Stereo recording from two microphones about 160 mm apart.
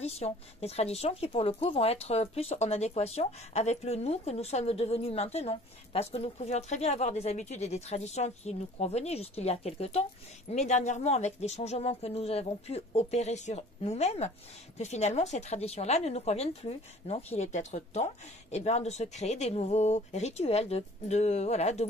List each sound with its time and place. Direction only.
0.0 s speech: 40° left (ahead or behind)